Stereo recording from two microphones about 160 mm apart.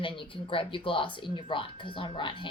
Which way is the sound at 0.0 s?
30° left (ahead or behind).